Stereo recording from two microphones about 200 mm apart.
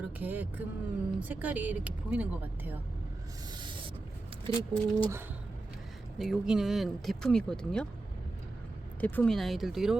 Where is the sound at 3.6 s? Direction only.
25° right (ahead or behind).